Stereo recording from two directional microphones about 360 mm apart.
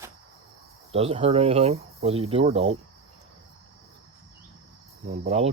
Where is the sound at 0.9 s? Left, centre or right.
Centre.